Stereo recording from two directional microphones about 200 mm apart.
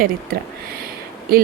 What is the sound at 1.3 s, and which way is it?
Speech, 45° right (ahead or behind).